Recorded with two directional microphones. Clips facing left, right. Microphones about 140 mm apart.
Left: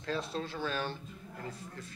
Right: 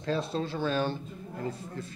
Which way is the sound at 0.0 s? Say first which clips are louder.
Right 5 dB; 25° right (ahead or behind).